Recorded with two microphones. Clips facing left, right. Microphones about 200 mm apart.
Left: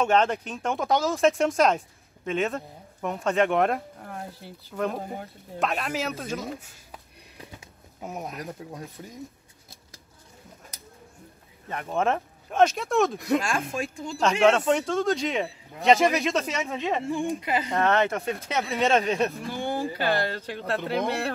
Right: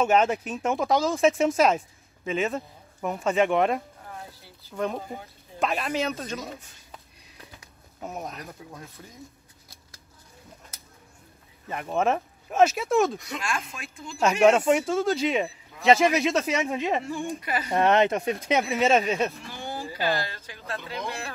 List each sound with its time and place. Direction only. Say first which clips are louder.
0.0 s speech: right 1 dB; 5° right (ahead or behind)
8.0 s speech: left 1 dB; 10° left (ahead or behind)
9.0 s speech: left 5 dB; 20° left (ahead or behind)
11.7 s speech: right 1 dB; 5° right (ahead or behind)
13.2 s speech: left 7 dB; 45° left (ahead or behind)
14.4 s speech: right 2 dB; 15° right (ahead or behind)
16.6 s speech: right 2 dB; 15° right (ahead or behind)
17.2 s speech: left 3 dB; 20° left (ahead or behind)
17.6 s speech: right 4 dB; 20° right (ahead or behind)
18.7 s speech: left 2 dB; centre (ahead or behind)
19.4 s a sound: left 7 dB; 50° left (ahead or behind)
20.0 s speech: left 2 dB; 60° left (ahead or behind)